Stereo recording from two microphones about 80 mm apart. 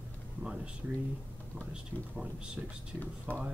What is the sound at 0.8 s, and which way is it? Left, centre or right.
Speech, centre.